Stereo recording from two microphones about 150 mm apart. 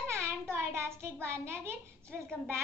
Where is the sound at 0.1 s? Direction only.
15° right (ahead or behind).